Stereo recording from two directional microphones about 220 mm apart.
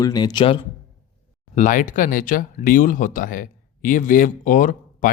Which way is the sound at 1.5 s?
35° left (ahead or behind).